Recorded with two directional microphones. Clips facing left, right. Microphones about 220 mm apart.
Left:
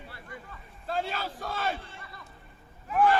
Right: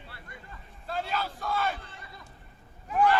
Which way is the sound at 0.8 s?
45° left (ahead or behind).